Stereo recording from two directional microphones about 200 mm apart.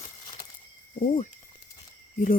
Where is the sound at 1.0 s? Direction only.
40° left (ahead or behind).